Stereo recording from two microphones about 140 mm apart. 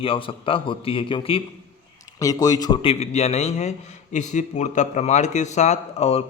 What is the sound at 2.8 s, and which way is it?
A man's voice, 45° left (ahead or behind).